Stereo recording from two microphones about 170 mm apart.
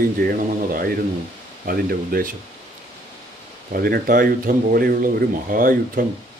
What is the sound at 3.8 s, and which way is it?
Speech, 55° right (ahead or behind).